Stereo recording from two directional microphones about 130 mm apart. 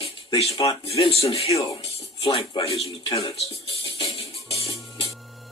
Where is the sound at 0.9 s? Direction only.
50° left (ahead or behind).